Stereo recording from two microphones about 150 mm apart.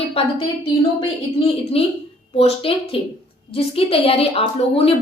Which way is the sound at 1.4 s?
40° left (ahead or behind).